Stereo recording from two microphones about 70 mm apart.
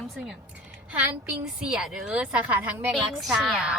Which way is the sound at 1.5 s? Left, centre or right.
Centre.